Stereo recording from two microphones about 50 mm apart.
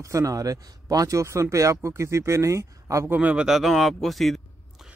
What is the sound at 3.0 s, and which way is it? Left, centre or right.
Speech, right.